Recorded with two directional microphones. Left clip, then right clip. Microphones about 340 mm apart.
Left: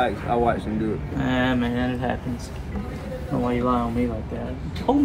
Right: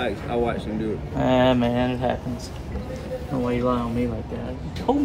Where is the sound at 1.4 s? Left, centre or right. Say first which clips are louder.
Right 3 dB; centre.